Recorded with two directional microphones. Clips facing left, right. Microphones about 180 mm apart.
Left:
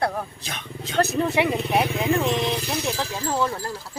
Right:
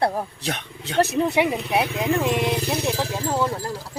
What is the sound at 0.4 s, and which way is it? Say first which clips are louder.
Speech: right 5 dB; 65° right (ahead or behind).